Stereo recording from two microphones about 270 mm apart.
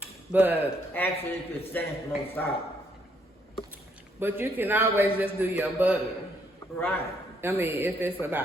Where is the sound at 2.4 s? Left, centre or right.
Centre.